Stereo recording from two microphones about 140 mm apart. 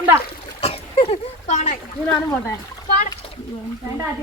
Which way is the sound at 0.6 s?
45° left (ahead or behind).